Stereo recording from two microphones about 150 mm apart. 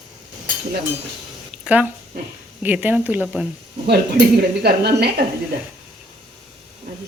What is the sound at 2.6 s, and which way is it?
Speech, 10° right (ahead or behind).